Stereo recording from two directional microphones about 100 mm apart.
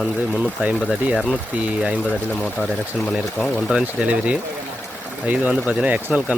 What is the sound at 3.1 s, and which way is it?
Speech, centre (ahead or behind).